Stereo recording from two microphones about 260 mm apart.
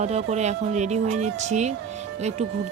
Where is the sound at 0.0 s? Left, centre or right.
Right.